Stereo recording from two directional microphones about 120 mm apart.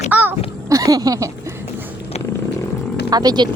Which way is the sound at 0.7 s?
30° right (ahead or behind).